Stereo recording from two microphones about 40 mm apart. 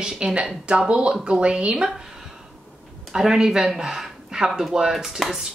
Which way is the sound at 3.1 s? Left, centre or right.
Centre.